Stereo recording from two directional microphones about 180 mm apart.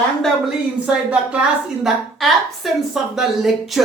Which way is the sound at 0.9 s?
5° right (ahead or behind).